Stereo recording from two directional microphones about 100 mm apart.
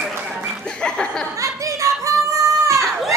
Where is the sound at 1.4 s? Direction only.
30° right (ahead or behind).